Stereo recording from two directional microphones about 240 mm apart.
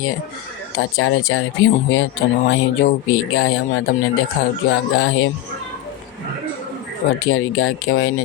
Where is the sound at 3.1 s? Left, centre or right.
Left.